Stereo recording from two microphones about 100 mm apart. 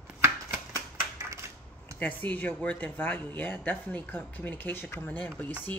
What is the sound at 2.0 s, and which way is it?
Speech, 15° left (ahead or behind).